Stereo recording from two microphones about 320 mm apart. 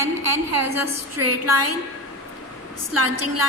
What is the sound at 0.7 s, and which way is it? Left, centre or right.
A woman's voice, right.